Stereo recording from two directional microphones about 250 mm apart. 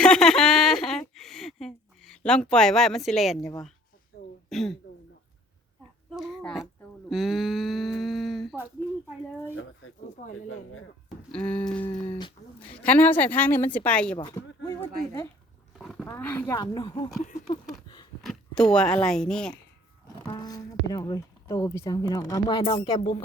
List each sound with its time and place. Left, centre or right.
0.0 s a sound: centre
4.4 s speech: centre
6.1 s a sound: centre
11.3 s a woman's voice: centre
11.9 s speech: centre
12.8 s speech: centre
14.2 s a sound: centre
15.8 s roaring cats: centre
16.0 s speech: centre
18.2 s a sound: centre
18.7 s a woman's voice: centre
20.2 s speech: centre